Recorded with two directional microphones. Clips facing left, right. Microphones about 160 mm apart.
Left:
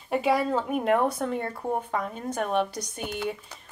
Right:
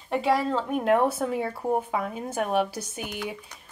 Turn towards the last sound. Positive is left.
turn(degrees=-5)  # may be behind; listen again after turning